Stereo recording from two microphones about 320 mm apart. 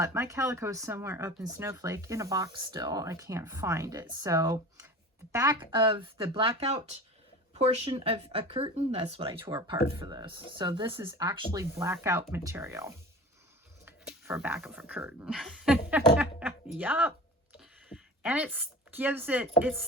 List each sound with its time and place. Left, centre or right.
0.0 s speech: centre
9.7 s speech: left
10.0 s speech: centre